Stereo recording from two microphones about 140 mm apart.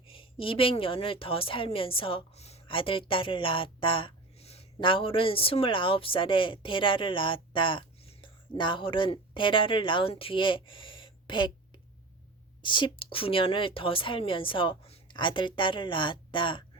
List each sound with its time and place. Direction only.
0.0 s a woman's voice: 40° left (ahead or behind)